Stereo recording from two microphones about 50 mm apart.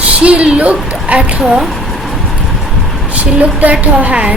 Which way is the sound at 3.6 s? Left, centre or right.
Right.